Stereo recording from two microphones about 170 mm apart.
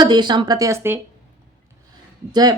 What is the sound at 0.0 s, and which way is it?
A woman's voice, 25° right (ahead or behind).